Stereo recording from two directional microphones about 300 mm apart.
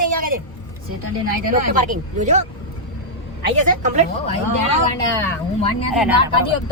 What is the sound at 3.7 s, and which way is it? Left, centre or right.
Speech, right.